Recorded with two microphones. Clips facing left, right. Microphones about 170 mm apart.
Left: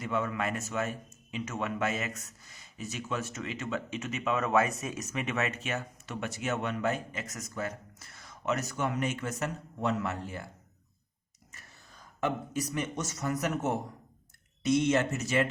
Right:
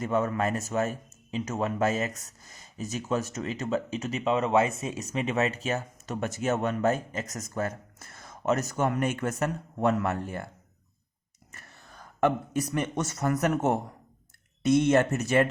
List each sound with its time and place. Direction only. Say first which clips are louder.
0.0 s a man's voice: right 5 dB; 40° right (ahead or behind)
11.5 s speech: right 5 dB; 55° right (ahead or behind)